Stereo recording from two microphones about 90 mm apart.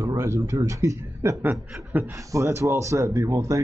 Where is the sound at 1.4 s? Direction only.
20° right (ahead or behind).